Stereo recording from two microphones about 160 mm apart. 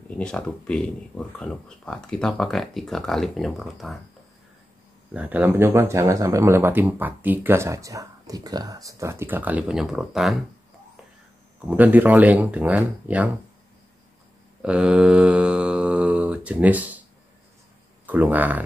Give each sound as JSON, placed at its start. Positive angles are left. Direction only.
{"t": 0.2, "sound": "speech", "side_deg": 5}
{"t": 5.1, "sound": "speech", "side_deg": -10}
{"t": 11.6, "sound": "speech", "side_deg": -10}
{"t": 14.6, "sound": "mantra", "side_deg": -5}
{"t": 18.0, "sound": "speech", "side_deg": -10}